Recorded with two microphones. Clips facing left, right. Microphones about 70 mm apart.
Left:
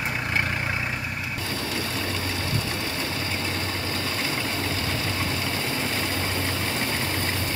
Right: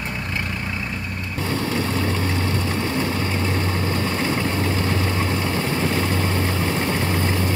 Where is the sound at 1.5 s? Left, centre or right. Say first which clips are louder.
Right 8 dB; right.